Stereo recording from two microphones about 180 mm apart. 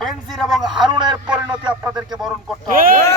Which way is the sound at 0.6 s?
25° right (ahead or behind).